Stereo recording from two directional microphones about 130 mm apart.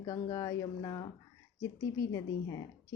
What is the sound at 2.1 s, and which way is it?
Speech, 25° left (ahead or behind).